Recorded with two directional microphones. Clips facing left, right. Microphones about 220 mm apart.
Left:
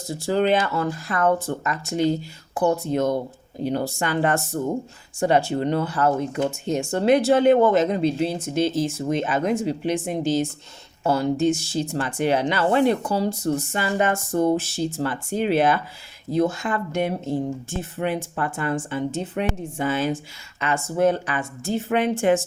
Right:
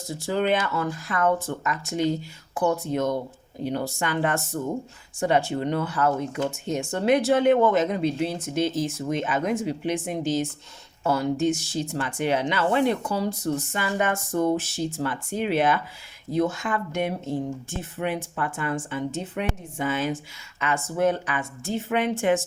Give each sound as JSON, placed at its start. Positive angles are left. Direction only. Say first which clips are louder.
{"t": 0.3, "sound": "speech", "louder": "left 3 dB", "side_deg": 35}